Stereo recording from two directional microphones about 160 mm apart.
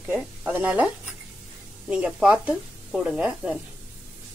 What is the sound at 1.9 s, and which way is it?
A woman's voice, 5° right (ahead or behind).